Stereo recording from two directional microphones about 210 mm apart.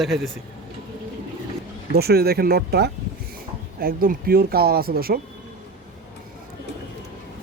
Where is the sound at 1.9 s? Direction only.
50° right (ahead or behind).